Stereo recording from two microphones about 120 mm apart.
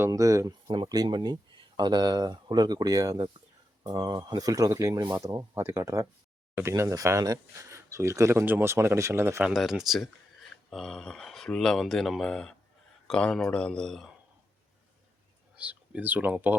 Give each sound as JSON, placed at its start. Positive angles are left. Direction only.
{"t": 0.1, "sound": "speech", "side_deg": -25}
{"t": 0.7, "sound": "speech", "side_deg": -35}
{"t": 9.4, "sound": "speech", "side_deg": -5}
{"t": 15.5, "sound": "speech", "side_deg": -10}